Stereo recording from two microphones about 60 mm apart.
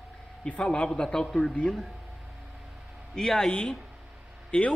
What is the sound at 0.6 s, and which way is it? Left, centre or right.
Speech, centre.